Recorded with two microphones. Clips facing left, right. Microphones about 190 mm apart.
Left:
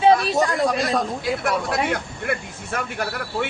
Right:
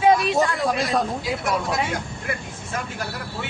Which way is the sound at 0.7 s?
Centre (ahead or behind).